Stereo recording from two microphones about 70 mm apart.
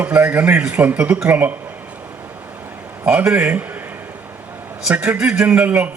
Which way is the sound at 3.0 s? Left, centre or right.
Right.